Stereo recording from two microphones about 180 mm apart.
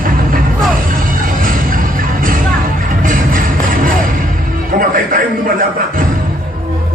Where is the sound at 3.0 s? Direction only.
50° right (ahead or behind).